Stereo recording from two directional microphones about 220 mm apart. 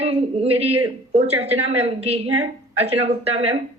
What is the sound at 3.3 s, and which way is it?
Speech, 25° right (ahead or behind).